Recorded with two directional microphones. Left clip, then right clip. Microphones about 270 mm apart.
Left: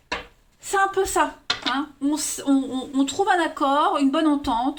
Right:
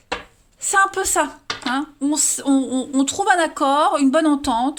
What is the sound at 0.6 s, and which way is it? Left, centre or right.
Speech, right.